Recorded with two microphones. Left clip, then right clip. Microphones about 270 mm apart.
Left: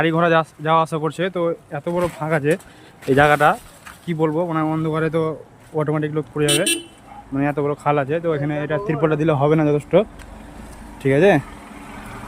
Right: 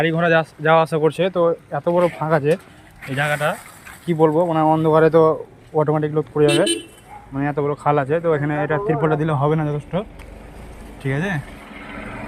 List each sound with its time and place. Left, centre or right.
0.0 s speech: centre